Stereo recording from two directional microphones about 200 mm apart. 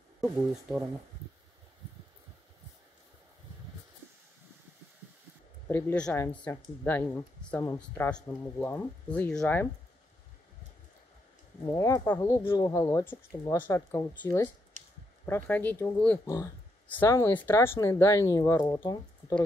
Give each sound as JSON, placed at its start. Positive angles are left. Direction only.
{"t": 0.2, "sound": "speech", "side_deg": -5}
{"t": 5.7, "sound": "speech", "side_deg": 10}
{"t": 11.7, "sound": "speech", "side_deg": 15}